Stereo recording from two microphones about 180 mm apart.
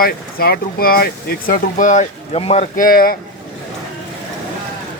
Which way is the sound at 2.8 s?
55° left (ahead or behind).